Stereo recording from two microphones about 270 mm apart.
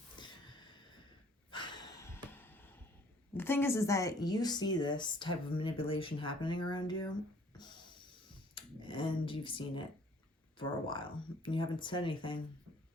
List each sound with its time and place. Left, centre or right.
0.2 s a sound: centre
3.3 s speech: centre
7.5 s music: centre
8.5 s speech: centre